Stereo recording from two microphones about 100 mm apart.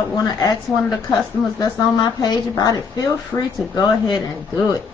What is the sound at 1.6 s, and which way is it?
A woman's voice, 40° left (ahead or behind).